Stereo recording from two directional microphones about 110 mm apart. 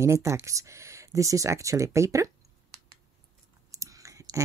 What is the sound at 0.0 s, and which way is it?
Speech, 25° right (ahead or behind).